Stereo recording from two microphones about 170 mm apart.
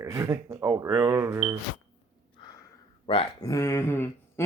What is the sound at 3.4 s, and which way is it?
Speech, 15° left (ahead or behind).